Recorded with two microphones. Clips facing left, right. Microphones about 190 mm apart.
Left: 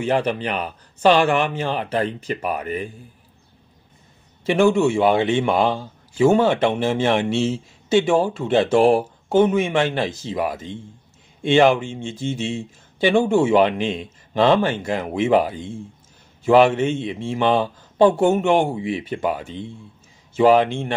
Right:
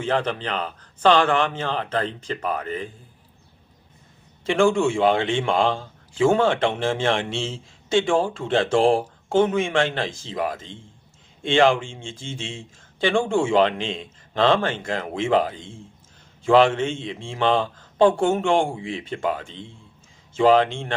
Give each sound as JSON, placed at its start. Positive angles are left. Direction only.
{"t": 0.0, "sound": "a man's voice", "side_deg": 10}
{"t": 4.6, "sound": "a man's voice", "side_deg": 5}